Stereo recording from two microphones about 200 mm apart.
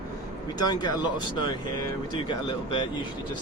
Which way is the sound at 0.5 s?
20° left (ahead or behind).